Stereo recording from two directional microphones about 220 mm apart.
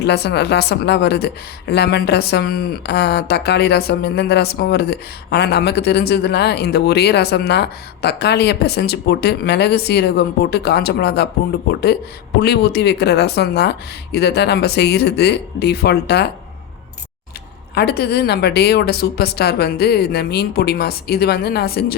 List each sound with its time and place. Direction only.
0.0 s a woman's voice: 50° left (ahead or behind)
17.7 s a woman's voice: 45° left (ahead or behind)